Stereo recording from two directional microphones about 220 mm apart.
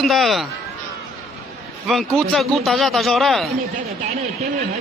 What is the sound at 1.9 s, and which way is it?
Speech, centre (ahead or behind).